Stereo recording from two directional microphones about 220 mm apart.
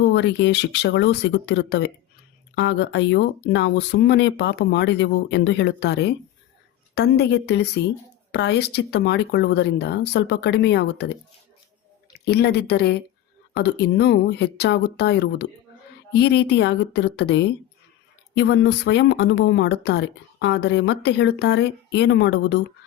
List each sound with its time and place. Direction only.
0.1 s speech: 50° left (ahead or behind)
12.2 s speech: 45° left (ahead or behind)